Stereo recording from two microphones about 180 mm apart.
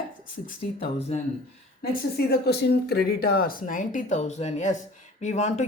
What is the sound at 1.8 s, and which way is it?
Speech, 55° left (ahead or behind).